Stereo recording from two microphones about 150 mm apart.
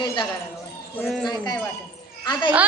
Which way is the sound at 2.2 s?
30° left (ahead or behind).